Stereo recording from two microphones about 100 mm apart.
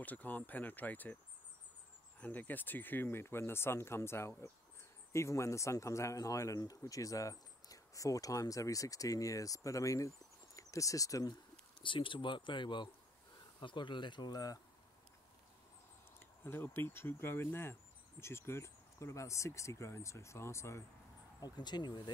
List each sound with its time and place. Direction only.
0.0 s speech: 15° left (ahead or behind)
2.1 s speech: 15° left (ahead or behind); by 11.3 s 35° left (ahead or behind)
11.8 s speech: 55° left (ahead or behind); by 14.6 s 40° left (ahead or behind)
16.2 s speech: 20° left (ahead or behind)
21.4 s speech: 45° left (ahead or behind)